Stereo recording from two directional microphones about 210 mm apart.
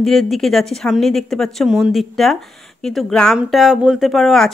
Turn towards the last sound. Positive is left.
turn(degrees=0)  # may be behind; listen again after turning